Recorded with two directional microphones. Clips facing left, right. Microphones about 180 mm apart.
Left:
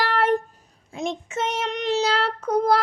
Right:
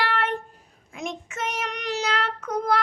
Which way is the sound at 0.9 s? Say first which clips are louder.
Left 5 dB; 30° left (ahead or behind).